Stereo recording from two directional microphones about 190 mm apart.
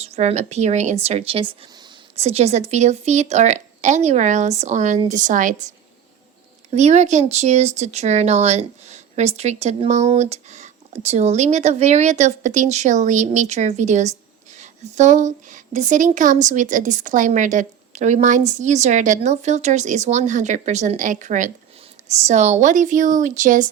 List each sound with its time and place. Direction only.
0.0 s speech: 35° right (ahead or behind)